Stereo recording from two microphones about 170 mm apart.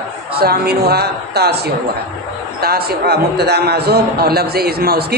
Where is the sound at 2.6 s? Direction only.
65° right (ahead or behind).